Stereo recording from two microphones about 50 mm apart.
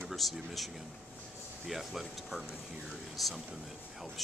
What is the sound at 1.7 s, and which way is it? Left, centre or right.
Speech, centre.